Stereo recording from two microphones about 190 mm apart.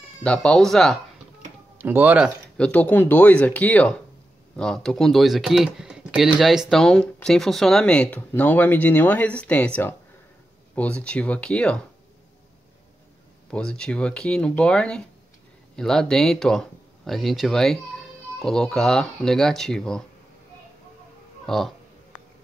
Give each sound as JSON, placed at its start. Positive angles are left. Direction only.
{"t": 0.2, "sound": "speech", "side_deg": 5}
{"t": 1.8, "sound": "speech", "side_deg": -10}
{"t": 13.5, "sound": "speech", "side_deg": 5}
{"t": 21.5, "sound": "speech", "side_deg": 0}